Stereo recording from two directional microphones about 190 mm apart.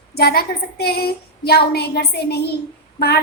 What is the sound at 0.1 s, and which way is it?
A woman's voice, 55° left (ahead or behind).